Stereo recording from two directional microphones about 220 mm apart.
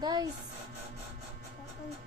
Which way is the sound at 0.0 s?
20° right (ahead or behind).